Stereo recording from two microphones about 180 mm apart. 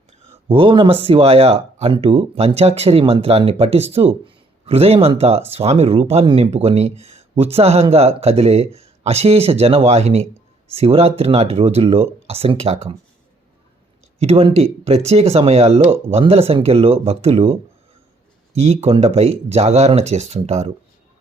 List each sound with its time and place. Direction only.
0.4 s speech: 30° right (ahead or behind)
14.2 s speech: 35° right (ahead or behind)